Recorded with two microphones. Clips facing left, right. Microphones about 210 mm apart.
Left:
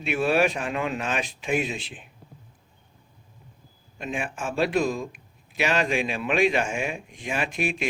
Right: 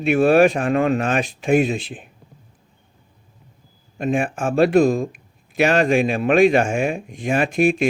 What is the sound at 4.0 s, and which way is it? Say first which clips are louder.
Speech: right 10 dB; 50° right (ahead or behind).